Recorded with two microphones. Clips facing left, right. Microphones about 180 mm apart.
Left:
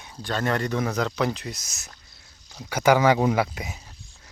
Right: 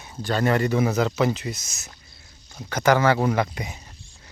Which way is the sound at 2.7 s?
10° left (ahead or behind).